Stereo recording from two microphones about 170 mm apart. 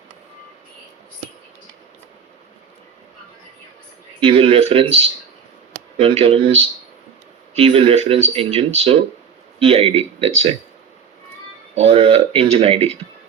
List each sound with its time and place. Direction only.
4.2 s speech: 35° right (ahead or behind)
11.7 s speech: 35° right (ahead or behind)